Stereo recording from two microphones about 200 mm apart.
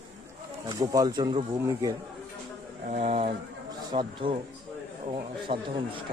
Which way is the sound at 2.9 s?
35° right (ahead or behind).